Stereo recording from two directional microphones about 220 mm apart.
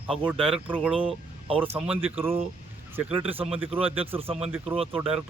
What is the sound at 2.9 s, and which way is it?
Speech, 10° right (ahead or behind).